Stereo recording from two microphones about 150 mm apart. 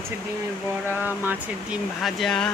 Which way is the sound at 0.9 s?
15° left (ahead or behind).